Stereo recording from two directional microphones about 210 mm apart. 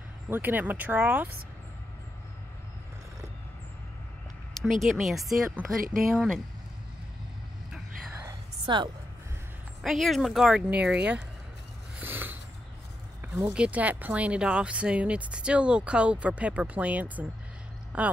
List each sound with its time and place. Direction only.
0.3 s speech: 10° right (ahead or behind)
4.6 s speech: centre (ahead or behind)
7.7 s whispering: 10° right (ahead or behind)
8.6 s a woman's voice: 20° right (ahead or behind)
9.8 s speech: centre (ahead or behind)
12.0 s a sound: 10° right (ahead or behind)
13.3 s speech: 5° right (ahead or behind)